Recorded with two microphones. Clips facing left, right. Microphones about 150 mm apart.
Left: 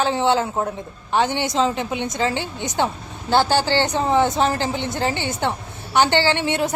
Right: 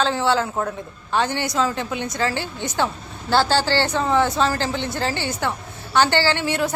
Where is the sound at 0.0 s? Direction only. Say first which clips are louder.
Left 1 dB; 20° left (ahead or behind).